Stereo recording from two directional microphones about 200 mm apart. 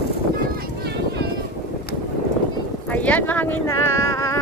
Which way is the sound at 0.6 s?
55° right (ahead or behind).